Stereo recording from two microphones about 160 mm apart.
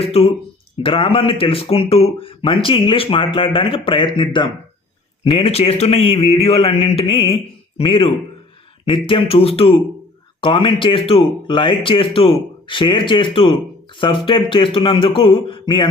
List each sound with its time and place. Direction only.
0.0 s speech: 40° left (ahead or behind)